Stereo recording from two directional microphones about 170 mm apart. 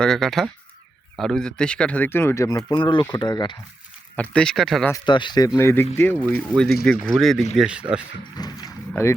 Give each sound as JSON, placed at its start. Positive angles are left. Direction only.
{"t": 0.0, "sound": "speech", "side_deg": 0}
{"t": 4.1, "sound": "speech", "side_deg": 5}
{"t": 5.0, "sound": "speech", "side_deg": 25}
{"t": 5.5, "sound": "speech", "side_deg": 15}
{"t": 8.4, "sound": "speech", "side_deg": 25}